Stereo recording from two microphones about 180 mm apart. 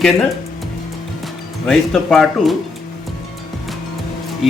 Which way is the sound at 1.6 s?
5° left (ahead or behind).